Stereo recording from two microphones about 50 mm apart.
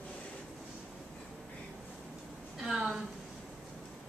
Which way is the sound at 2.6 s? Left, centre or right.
Centre.